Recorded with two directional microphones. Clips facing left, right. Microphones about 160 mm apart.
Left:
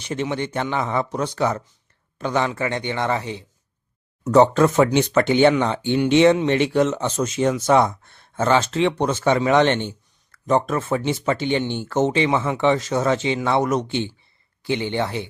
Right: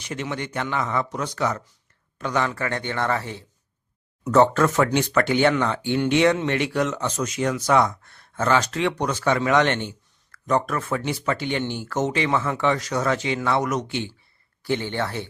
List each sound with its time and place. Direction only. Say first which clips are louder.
0.0 s a man's voice: left 5 dB; 30° left (ahead or behind)